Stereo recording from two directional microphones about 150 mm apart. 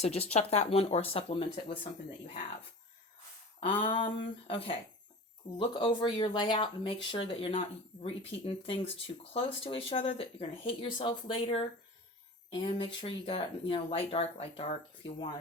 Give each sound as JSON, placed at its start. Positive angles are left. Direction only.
{"t": 0.0, "sound": "speech", "side_deg": 45}
{"t": 3.6, "sound": "speech", "side_deg": 35}